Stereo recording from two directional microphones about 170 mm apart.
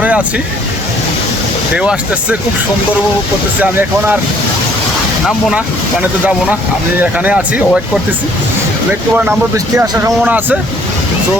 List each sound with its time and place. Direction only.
1.7 s speech: 5° right (ahead or behind)
3.6 s speech: 10° right (ahead or behind)
5.5 s speech: 10° right (ahead or behind)
9.7 s speech: 20° right (ahead or behind)